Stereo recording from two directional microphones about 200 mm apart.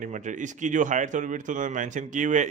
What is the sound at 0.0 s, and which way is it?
Speech, 40° right (ahead or behind).